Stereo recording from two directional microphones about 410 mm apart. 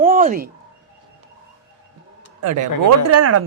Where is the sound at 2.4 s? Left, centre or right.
Right.